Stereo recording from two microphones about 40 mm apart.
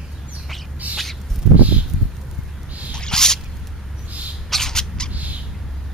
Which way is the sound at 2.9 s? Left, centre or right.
Centre.